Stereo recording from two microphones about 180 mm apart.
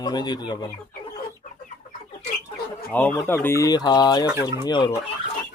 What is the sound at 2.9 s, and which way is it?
Speech, 10° left (ahead or behind).